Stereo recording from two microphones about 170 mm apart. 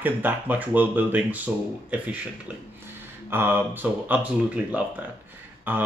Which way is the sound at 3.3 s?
10° right (ahead or behind).